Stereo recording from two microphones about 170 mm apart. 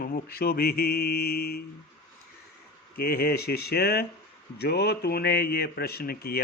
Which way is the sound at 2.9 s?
65° left (ahead or behind).